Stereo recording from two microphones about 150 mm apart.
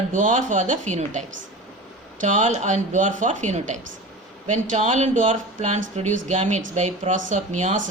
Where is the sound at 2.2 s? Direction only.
55° right (ahead or behind).